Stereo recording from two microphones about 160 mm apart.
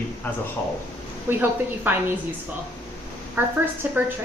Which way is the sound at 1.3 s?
10° right (ahead or behind).